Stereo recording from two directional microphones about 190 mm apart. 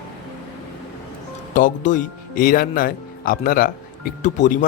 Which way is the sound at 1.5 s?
45° left (ahead or behind).